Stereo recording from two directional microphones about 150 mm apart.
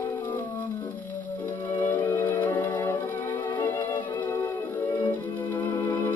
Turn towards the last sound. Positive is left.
turn(degrees=20)  # may be behind; listen again after turning